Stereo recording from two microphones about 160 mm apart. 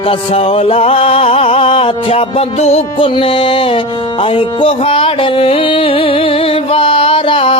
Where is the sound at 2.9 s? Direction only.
30° left (ahead or behind).